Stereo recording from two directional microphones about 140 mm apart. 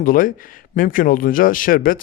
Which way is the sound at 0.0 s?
80° left.